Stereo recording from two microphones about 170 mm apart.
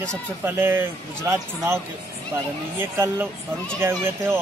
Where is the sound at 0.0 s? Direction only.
15° right (ahead or behind).